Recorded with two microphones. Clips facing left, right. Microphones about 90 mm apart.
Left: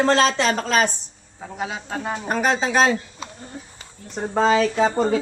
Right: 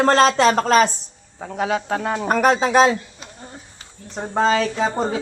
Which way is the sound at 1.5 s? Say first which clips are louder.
Right 7 dB; 60° right (ahead or behind).